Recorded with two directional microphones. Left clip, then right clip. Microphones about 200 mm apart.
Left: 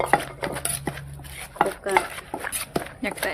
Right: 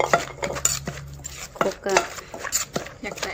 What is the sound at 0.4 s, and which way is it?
Cutlery, 10° left (ahead or behind).